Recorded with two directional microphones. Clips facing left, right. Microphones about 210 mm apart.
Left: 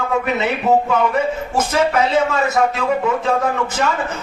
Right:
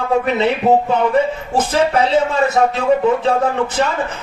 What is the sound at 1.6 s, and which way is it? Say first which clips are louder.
Speech: right 2 dB; 35° right (ahead or behind).